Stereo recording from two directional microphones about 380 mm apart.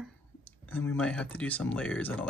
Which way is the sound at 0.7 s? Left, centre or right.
Centre.